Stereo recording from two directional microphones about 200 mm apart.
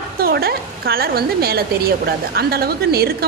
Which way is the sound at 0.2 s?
50° right (ahead or behind).